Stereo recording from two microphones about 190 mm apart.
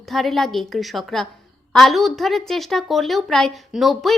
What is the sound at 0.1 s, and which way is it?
A woman's voice, centre (ahead or behind).